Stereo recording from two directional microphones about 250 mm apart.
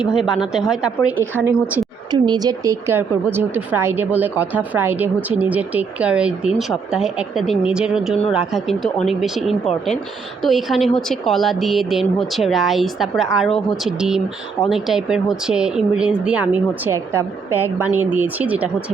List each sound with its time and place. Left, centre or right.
0.0 s speech: centre
2.0 s a woman's voice: centre